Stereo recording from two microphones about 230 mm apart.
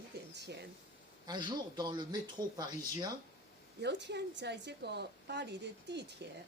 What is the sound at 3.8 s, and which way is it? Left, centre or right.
A woman's voice, right.